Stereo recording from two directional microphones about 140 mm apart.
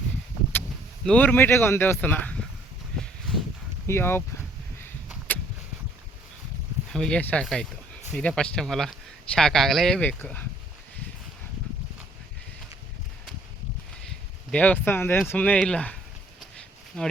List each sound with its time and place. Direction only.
1.0 s speech: 10° left (ahead or behind)
3.8 s speech: 15° left (ahead or behind)
6.9 s speech: 5° left (ahead or behind)
14.5 s speech: 10° left (ahead or behind)
16.6 s a sound: 5° left (ahead or behind)